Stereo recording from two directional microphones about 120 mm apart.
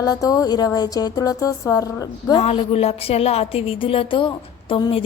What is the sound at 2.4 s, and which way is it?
A woman's voice, 55° left (ahead or behind).